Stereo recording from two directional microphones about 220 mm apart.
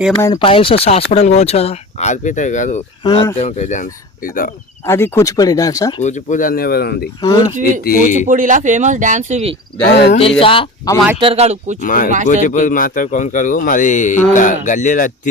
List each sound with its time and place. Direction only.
0.2 s speech: 20° left (ahead or behind)
3.0 s speech: 20° left (ahead or behind)
4.9 s speech: 10° left (ahead or behind)
6.0 s a man's voice: 35° left (ahead or behind)
7.2 s speech: 15° left (ahead or behind)
7.9 s a man's voice: 35° left (ahead or behind)
8.3 s speech: 35° right (ahead or behind)
10.1 s speech: 25° left (ahead or behind)
11.2 s speech: 25° right (ahead or behind)
11.8 s a man's voice: 40° left (ahead or behind)